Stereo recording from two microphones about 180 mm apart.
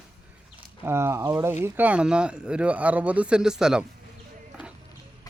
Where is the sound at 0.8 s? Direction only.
15° right (ahead or behind).